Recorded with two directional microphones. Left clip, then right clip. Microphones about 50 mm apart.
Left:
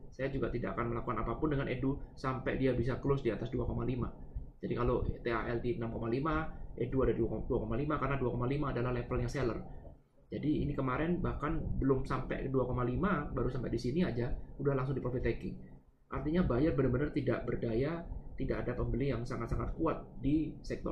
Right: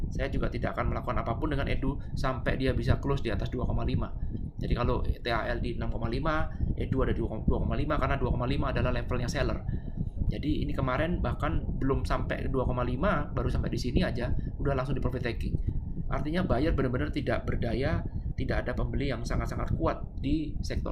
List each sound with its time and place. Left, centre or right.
0.2 s speech: right